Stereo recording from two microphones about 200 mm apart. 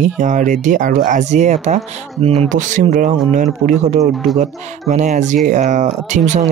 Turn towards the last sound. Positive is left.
turn(degrees=-35)  # may be behind; listen again after turning